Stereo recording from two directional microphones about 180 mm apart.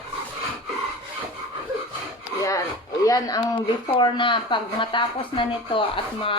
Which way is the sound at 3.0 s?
20° left (ahead or behind).